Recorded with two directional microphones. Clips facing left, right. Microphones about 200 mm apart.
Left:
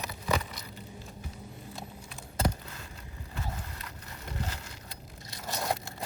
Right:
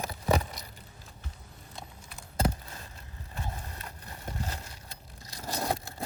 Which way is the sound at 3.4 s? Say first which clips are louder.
Even; 35° right (ahead or behind).